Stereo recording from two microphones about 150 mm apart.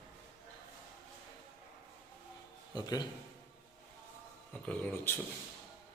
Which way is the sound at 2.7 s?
30° left (ahead or behind).